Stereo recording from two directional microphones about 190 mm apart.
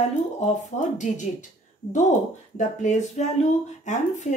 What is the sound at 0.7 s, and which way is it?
Speech, 40° left (ahead or behind).